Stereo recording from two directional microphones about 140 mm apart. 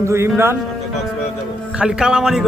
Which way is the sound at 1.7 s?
5° right (ahead or behind).